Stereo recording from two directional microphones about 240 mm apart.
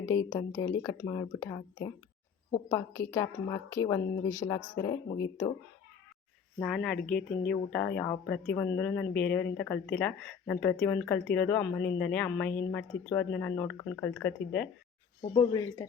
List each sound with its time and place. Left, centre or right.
0.3 s speech: centre
6.6 s speech: centre
15.4 s speech: centre